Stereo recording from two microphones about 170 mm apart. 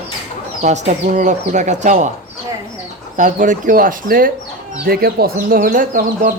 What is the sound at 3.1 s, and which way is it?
Speech, 50° right (ahead or behind).